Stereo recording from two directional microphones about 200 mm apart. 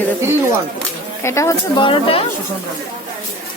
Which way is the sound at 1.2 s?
15° left (ahead or behind).